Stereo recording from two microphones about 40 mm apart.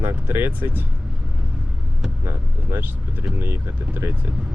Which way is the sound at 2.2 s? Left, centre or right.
Right.